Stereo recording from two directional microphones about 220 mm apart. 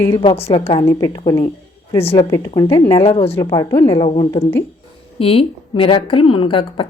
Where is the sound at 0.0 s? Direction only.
15° left (ahead or behind).